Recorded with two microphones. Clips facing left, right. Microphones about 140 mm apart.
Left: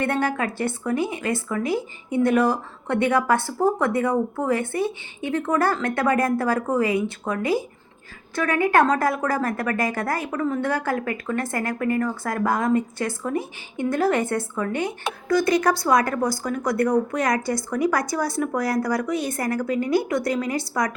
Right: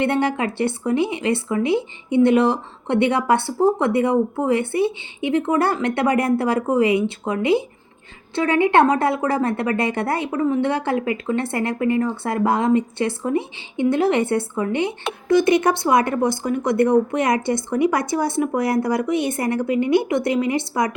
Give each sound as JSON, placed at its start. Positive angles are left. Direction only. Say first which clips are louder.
{"t": 0.0, "sound": "a woman's voice", "louder": "right 3 dB", "side_deg": -25}